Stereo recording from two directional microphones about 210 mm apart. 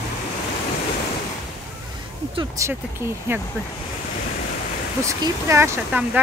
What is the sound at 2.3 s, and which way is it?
Speech, 15° right (ahead or behind).